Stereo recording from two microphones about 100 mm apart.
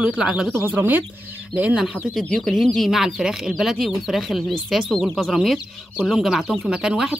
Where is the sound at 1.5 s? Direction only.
10° right (ahead or behind).